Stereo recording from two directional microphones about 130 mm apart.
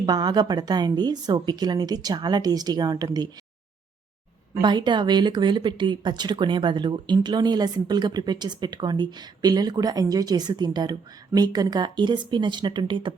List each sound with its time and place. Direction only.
0.0 s speech: 30° right (ahead or behind)
4.6 s speech: 35° right (ahead or behind)